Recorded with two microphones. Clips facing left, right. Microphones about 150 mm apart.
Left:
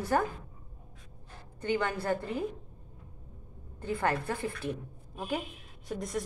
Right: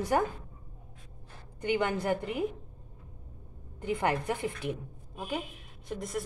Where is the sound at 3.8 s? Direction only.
15° right (ahead or behind).